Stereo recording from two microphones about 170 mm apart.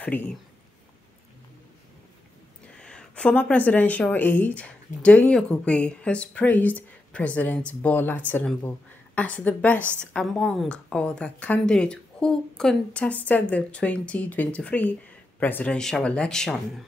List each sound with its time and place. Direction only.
0.0 s speech: 10° left (ahead or behind)
2.8 s speech: 5° left (ahead or behind)